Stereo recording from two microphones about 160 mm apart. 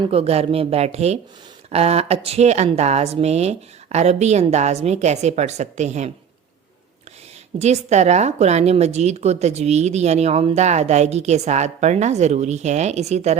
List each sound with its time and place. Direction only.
0.0 s a woman's voice: 35° right (ahead or behind)
7.6 s a woman's voice: 45° right (ahead or behind)